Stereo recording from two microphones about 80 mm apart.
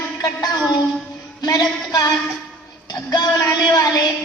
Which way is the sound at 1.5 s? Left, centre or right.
Left.